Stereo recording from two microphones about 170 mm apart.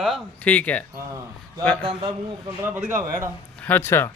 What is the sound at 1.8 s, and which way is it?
Speech, 30° right (ahead or behind).